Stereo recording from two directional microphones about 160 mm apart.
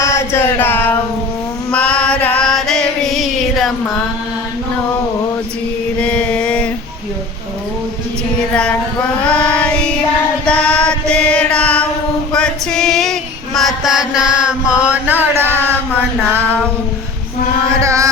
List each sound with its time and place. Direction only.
0.0 s a sound: 15° left (ahead or behind)
1.7 s music: 5° left (ahead or behind)
6.0 s mantra: 5° left (ahead or behind)
9.2 s child singing: 5° left (ahead or behind)
12.3 s female singing: 5° left (ahead or behind); by 15.7 s 15° right (ahead or behind)
17.7 s mantra: 20° right (ahead or behind)